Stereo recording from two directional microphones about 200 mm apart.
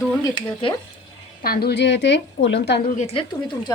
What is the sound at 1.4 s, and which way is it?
A woman's voice, 50° left (ahead or behind).